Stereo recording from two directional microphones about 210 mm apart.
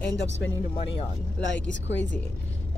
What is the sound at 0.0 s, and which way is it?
Speech, 60° left (ahead or behind).